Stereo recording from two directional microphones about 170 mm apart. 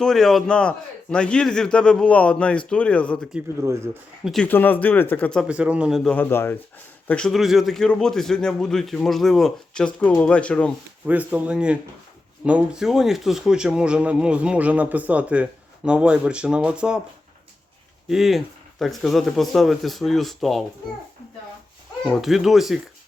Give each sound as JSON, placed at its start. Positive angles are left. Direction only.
{"t": 0.0, "sound": "speech", "side_deg": 0}
{"t": 3.6, "sound": "speech", "side_deg": -15}
{"t": 4.2, "sound": "speech", "side_deg": 0}
{"t": 5.5, "sound": "speech", "side_deg": -5}
{"t": 6.1, "sound": "speech", "side_deg": 10}
{"t": 11.0, "sound": "speech", "side_deg": -10}
{"t": 18.1, "sound": "speech", "side_deg": 0}
{"t": 22.0, "sound": "speech", "side_deg": 0}